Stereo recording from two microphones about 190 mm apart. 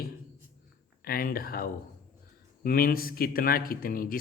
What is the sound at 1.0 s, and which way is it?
A man's voice, 50° left (ahead or behind).